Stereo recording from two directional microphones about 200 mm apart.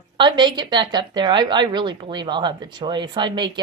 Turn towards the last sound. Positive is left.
turn(degrees=-25)  # may be behind; listen again after turning